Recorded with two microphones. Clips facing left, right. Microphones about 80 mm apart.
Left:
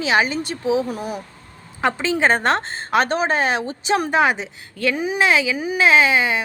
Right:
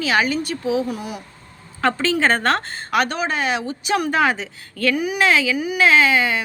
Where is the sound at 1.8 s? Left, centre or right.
Centre.